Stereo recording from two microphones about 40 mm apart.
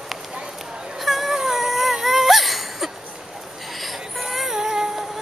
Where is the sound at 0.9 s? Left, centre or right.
Centre.